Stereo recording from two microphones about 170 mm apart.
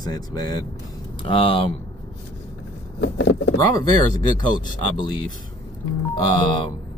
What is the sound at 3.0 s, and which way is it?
Speech, 90° left.